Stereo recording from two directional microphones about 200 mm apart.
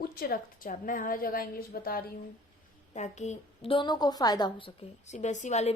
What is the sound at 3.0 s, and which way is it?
A woman's voice, 35° left (ahead or behind).